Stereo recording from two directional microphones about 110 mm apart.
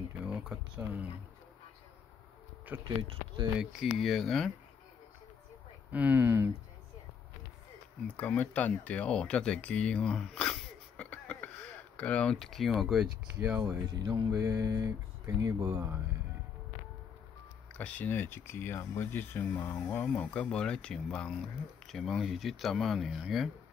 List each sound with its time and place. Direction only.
0.2 s a sound: 10° right (ahead or behind)
0.7 s speech: 15° right (ahead or behind)
2.7 s speech: 15° right (ahead or behind)
3.0 s speech: 50° right (ahead or behind)
3.5 s speech: centre (ahead or behind)
5.9 s speech: 15° right (ahead or behind)
8.2 s speech: 15° left (ahead or behind); by 13.1 s 5° right (ahead or behind)
13.4 s speech: 25° right (ahead or behind)
17.7 s speech: 15° left (ahead or behind)